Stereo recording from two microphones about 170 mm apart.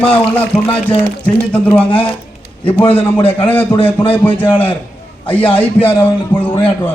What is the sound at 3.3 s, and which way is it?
A man's voice, 10° left (ahead or behind).